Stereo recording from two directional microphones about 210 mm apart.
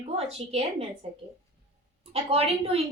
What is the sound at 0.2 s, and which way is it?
Speech, 30° right (ahead or behind).